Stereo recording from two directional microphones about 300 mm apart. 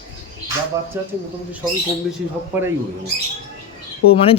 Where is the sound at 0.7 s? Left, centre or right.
Centre.